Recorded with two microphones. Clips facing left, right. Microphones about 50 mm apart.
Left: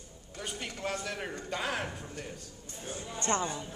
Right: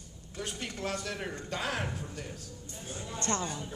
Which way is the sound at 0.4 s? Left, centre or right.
Centre.